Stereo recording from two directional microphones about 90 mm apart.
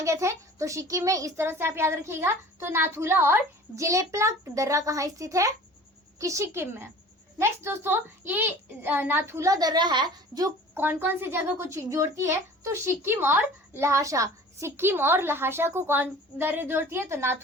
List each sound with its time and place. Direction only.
0.0 s a child's voice: 35° right (ahead or behind)
9.5 s a woman's voice: 45° right (ahead or behind)
10.8 s a child's voice: 25° right (ahead or behind)